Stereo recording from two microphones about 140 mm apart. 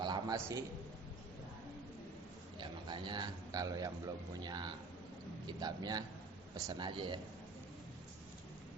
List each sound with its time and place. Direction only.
0.0 s a sound: 30° right (ahead or behind)
0.3 s speech: 20° right (ahead or behind)
2.6 s a man's voice: 35° right (ahead or behind)